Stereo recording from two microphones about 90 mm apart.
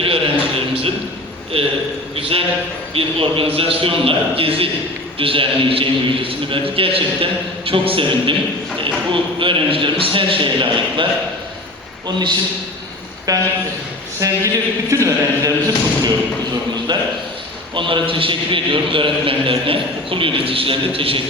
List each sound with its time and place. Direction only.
0.0 s a sound: 90° right
1.5 s a man's voice: 90° right
9.4 s a man's voice: 75° right (ahead or behind)
13.3 s a man's voice: 40° right (ahead or behind)
16.9 s a man's voice: 55° right (ahead or behind)
17.7 s a man's voice: 70° right (ahead or behind); by 21.2 s 90° right